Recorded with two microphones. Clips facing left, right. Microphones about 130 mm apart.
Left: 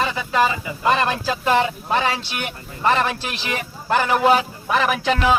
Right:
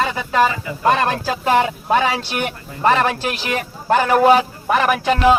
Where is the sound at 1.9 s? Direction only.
50° right (ahead or behind).